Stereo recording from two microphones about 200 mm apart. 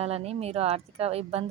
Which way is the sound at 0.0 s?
30° right (ahead or behind).